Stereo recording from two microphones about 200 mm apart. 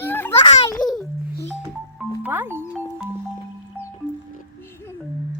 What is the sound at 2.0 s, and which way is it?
Music, 10° right (ahead or behind).